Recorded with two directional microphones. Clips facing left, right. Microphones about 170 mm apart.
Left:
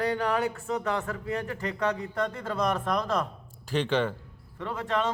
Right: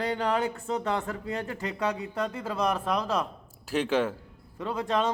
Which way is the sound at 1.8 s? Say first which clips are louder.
Left 1 dB; 10° right (ahead or behind).